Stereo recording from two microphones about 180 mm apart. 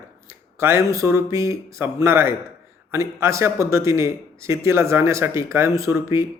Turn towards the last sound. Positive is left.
turn(degrees=-15)  # may be behind; listen again after turning